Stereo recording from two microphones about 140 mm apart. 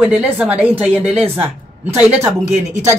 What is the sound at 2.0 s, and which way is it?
Speech, 10° right (ahead or behind).